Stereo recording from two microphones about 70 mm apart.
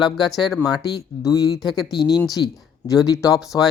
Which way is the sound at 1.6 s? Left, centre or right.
Left.